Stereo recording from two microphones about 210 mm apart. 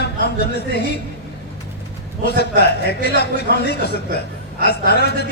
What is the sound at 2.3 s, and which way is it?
A man's voice, 50° left (ahead or behind).